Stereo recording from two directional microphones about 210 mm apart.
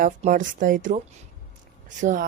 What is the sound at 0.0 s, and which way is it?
A woman's voice, 35° right (ahead or behind).